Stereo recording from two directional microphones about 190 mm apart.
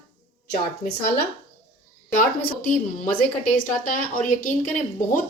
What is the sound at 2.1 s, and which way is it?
A woman's voice, 45° left (ahead or behind).